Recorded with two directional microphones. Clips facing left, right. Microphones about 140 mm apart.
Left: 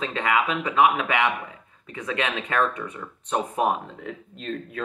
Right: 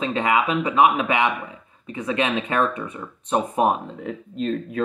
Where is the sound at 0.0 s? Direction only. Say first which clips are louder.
Right 3 dB; 15° right (ahead or behind).